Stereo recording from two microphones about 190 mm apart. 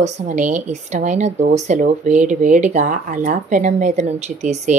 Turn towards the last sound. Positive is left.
turn(degrees=-35)  # may be behind; listen again after turning